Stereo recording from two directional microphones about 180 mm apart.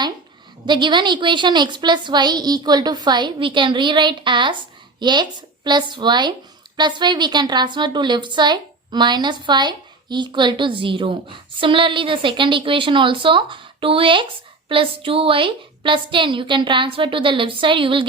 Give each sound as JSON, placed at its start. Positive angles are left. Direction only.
{"t": 0.6, "sound": "a woman's voice", "side_deg": -25}